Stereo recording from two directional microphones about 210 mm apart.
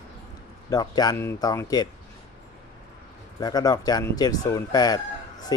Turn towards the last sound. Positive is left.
turn(degrees=20)  # may be behind; listen again after turning